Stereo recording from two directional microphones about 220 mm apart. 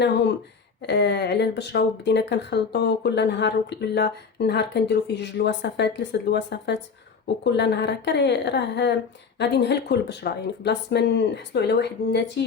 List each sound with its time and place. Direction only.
0.8 s speech: 50° left (ahead or behind)